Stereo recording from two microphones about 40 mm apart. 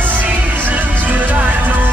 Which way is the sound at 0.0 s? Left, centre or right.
Right.